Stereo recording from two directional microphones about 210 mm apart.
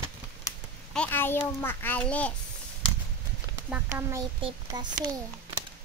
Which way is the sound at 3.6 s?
5° right (ahead or behind).